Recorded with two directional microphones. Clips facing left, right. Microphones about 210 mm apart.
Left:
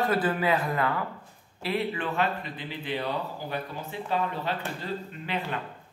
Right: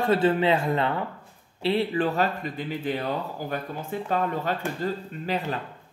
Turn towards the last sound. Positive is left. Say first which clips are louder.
# right 4 dB
turn(degrees=-40)  # may be behind; listen again after turning